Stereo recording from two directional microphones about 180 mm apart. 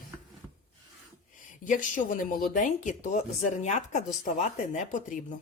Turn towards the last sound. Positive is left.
turn(degrees=45)  # may be behind; listen again after turning